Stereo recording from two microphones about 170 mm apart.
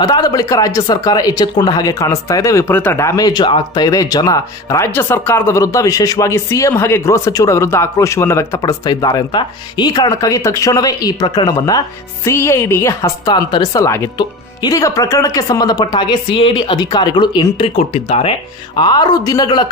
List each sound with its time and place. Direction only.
0.0 s speech: 25° left (ahead or behind)
18.8 s speech: 25° left (ahead or behind)